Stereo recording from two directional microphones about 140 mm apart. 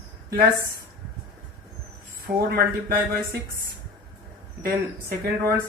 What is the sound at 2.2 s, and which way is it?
Speech, 90° right.